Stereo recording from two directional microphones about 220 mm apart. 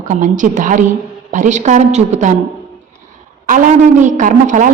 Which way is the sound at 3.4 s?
35° right (ahead or behind).